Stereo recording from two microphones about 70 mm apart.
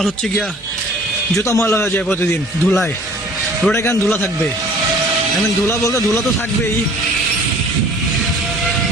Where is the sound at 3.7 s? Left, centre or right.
Left.